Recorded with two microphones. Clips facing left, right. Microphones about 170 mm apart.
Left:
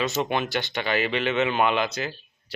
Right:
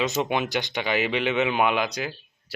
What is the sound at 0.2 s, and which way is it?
Speech, 15° right (ahead or behind).